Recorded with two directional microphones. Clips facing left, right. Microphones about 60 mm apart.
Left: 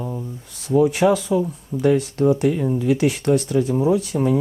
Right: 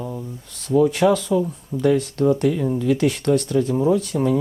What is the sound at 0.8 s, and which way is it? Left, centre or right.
Speech, centre.